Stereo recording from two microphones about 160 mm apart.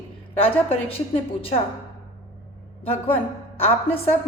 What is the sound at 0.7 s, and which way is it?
Speech, 40° left (ahead or behind).